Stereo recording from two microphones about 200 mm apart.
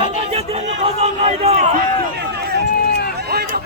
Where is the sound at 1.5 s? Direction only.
45° right (ahead or behind).